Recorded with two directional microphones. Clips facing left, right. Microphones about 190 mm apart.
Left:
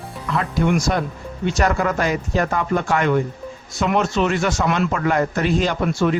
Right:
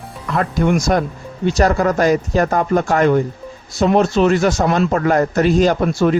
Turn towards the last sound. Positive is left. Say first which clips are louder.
# right 5 dB
turn(degrees=-40)  # may be behind; listen again after turning